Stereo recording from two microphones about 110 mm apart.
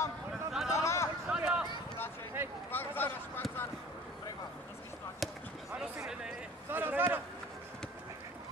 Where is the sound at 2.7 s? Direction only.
20° left (ahead or behind).